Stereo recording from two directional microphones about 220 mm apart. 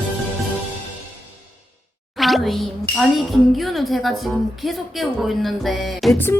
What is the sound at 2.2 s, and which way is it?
Speech, centre (ahead or behind).